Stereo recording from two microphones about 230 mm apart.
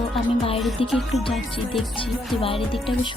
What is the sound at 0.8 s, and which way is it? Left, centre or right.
Speech, left.